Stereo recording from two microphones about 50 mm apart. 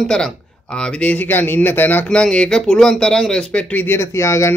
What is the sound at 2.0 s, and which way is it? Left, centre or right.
Speech, centre.